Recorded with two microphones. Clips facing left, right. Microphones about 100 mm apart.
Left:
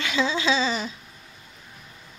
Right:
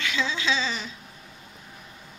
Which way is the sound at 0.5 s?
35° left (ahead or behind).